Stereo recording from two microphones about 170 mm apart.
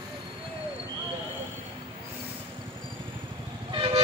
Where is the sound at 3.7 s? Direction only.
30° right (ahead or behind).